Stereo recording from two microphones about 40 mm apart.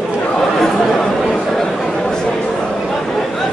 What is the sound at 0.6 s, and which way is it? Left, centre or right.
Chatter, centre.